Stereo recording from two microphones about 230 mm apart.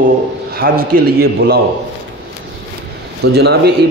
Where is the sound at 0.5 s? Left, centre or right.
Right.